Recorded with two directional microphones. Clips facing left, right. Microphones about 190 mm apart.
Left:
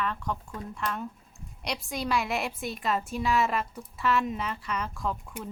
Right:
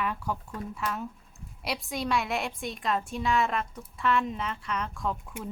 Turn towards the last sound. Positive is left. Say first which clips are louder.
# even
turn(degrees=0)  # may be behind; listen again after turning